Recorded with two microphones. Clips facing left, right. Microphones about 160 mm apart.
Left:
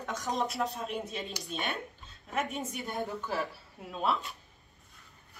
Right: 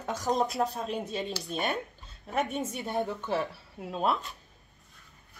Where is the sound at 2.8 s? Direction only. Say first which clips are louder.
Right 4 dB; 20° right (ahead or behind).